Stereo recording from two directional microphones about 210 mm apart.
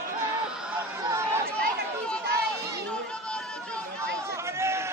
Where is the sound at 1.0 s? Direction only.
15° right (ahead or behind).